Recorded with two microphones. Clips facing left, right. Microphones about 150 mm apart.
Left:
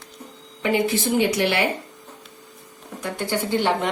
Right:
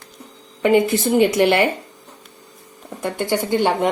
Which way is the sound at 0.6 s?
50° right (ahead or behind).